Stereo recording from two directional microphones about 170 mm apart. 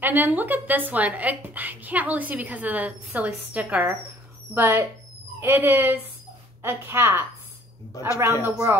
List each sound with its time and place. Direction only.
0.0 s speech: 10° right (ahead or behind)